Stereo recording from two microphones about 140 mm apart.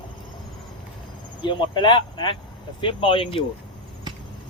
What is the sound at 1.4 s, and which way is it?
Speech, 35° left (ahead or behind).